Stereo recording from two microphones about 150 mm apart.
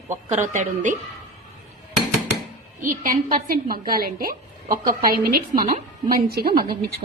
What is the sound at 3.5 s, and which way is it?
A woman's voice, 75° right (ahead or behind).